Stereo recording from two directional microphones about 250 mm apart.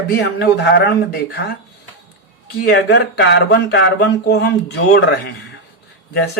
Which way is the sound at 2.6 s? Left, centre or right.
Left.